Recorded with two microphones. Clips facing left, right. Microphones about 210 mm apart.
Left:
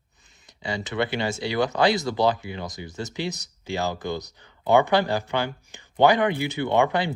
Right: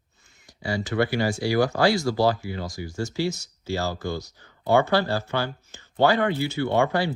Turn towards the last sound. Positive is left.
turn(degrees=20)  # may be behind; listen again after turning